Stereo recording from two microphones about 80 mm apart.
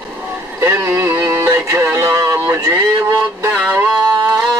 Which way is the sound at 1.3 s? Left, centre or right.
Right.